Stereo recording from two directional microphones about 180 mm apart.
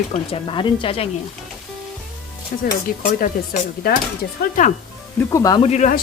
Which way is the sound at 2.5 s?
50° left (ahead or behind).